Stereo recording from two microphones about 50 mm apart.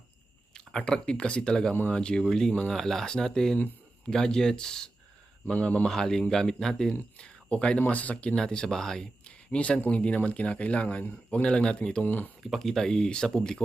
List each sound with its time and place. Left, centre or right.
0.5 s speech: centre
5.5 s speech: left
5.9 s speech: centre
7.2 s speech: left
8.4 s speech: centre
9.5 s speech: left
12.0 s speech: left
12.4 s speech: centre